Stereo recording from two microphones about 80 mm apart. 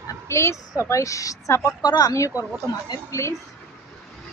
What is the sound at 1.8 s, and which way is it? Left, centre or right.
Speech, left.